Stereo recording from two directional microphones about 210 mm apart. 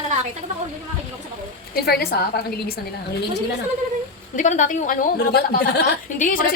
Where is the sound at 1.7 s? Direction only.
45° left (ahead or behind).